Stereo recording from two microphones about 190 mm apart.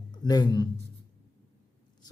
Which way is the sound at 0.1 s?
20° left (ahead or behind).